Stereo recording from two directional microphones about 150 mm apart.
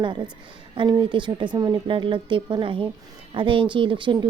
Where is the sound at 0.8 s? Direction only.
30° right (ahead or behind).